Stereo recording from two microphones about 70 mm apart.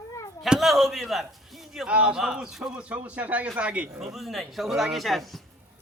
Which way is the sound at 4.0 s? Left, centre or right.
Centre.